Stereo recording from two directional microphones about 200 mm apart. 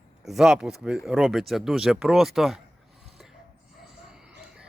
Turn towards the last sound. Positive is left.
turn(degrees=-5)  # may be behind; listen again after turning